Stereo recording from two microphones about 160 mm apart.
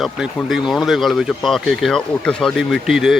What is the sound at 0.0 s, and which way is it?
A man's voice, centre (ahead or behind).